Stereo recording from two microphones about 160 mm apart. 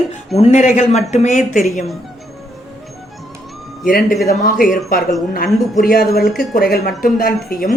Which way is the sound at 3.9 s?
65° left (ahead or behind).